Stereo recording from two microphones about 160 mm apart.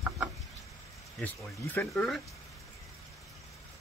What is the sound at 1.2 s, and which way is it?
Speech, 10° left (ahead or behind).